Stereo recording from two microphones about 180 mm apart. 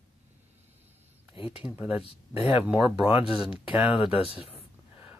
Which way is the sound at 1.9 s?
30° left (ahead or behind).